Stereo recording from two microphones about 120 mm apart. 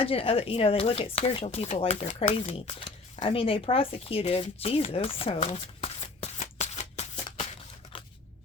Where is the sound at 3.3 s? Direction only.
50° left (ahead or behind); by 7.5 s 65° left (ahead or behind).